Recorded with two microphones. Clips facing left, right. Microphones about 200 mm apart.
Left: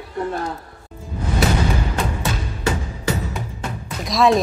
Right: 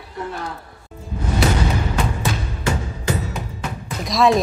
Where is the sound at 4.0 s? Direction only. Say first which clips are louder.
Even; centre (ahead or behind).